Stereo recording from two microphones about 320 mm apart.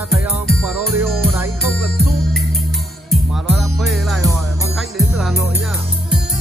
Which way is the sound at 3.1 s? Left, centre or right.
Centre.